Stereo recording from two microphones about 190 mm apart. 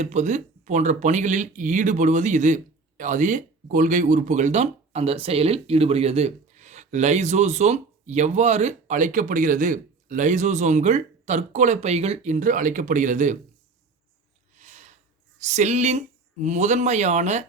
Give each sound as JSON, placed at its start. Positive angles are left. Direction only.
{"t": 0.0, "sound": "speech", "side_deg": -35}
{"t": 14.5, "sound": "a sound", "side_deg": -40}
{"t": 15.4, "sound": "speech", "side_deg": -35}